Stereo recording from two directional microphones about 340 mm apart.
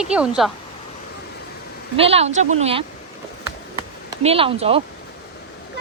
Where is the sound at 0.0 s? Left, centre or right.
Centre.